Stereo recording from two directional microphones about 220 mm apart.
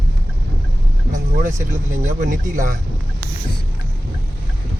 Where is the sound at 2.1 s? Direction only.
35° right (ahead or behind).